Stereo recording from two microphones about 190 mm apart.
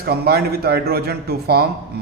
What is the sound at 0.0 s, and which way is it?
A man's voice, 55° right (ahead or behind).